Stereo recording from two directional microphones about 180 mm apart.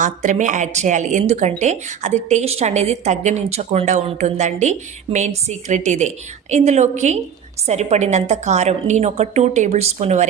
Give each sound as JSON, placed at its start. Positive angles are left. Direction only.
{"t": 0.0, "sound": "speech", "side_deg": -45}